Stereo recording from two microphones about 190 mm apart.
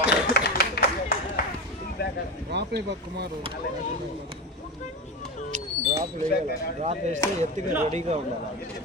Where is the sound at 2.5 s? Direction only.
60° right (ahead or behind).